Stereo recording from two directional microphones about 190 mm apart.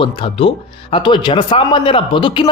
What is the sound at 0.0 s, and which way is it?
A man's voice, 30° left (ahead or behind).